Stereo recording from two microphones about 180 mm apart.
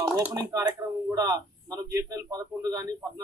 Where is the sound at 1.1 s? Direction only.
20° right (ahead or behind).